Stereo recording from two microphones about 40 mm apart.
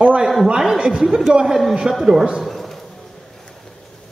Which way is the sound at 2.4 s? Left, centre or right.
Centre.